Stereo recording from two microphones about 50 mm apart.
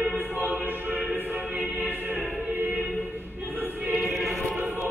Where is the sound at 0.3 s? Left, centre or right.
Right.